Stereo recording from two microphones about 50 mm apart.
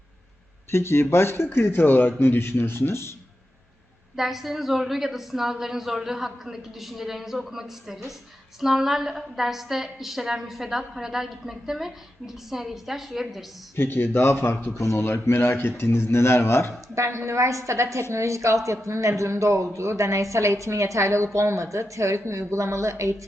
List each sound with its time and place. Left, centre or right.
0.7 s a man's voice: left
4.1 s a woman's voice: centre
13.7 s a man's voice: left
16.9 s a woman's voice: right